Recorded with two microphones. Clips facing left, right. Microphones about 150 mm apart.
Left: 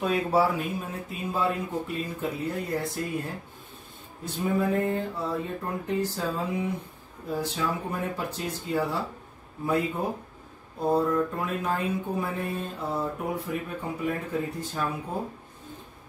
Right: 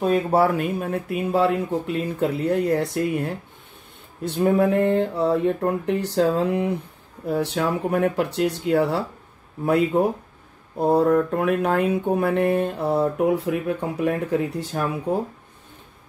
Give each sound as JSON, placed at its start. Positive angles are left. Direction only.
{"t": 0.3, "sound": "speech", "side_deg": -60}